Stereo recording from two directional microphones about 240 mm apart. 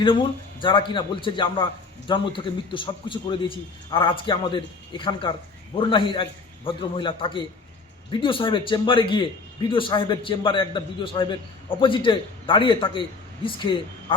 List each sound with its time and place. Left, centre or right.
0.0 s a man's voice: centre